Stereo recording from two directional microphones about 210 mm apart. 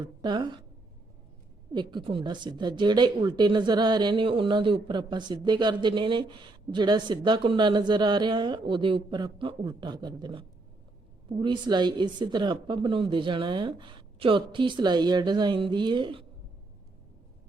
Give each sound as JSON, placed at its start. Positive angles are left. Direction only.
{"t": 0.0, "sound": "a woman's voice", "side_deg": -20}
{"t": 1.7, "sound": "a woman's voice", "side_deg": -20}